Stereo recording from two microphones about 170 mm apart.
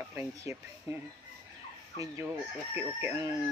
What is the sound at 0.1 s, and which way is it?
Chicken, 15° right (ahead or behind).